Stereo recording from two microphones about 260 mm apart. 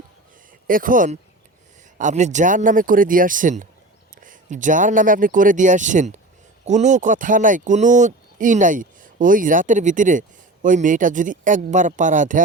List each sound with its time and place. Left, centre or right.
0.7 s speech: right